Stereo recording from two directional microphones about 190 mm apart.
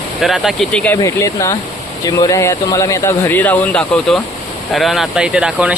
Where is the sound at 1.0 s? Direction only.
15° left (ahead or behind); by 5.7 s 5° right (ahead or behind).